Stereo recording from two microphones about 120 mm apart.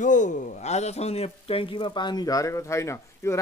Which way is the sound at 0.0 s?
90° left.